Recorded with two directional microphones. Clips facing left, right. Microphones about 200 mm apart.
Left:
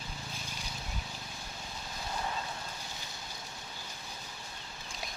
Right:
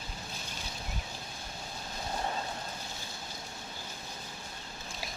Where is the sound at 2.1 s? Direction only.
40° right (ahead or behind).